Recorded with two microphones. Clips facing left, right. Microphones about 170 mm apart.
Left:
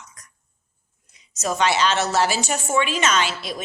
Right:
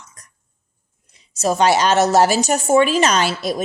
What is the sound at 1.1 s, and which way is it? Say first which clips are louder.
A woman's voice: right 6 dB; 30° right (ahead or behind).